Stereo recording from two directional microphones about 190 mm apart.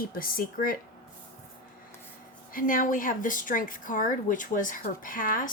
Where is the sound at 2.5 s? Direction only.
45° left (ahead or behind).